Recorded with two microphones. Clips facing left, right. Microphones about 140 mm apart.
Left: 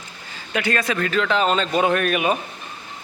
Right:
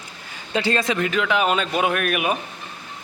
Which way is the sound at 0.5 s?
25° right (ahead or behind).